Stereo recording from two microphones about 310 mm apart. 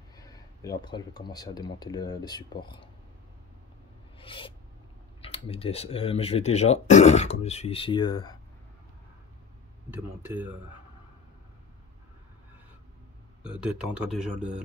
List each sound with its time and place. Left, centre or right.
0.2 s speech: centre
4.2 s filing: centre
5.2 s speech: centre
10.2 s speech: centre
13.5 s speech: centre